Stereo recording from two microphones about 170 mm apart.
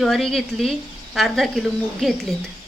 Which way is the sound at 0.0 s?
Centre (ahead or behind).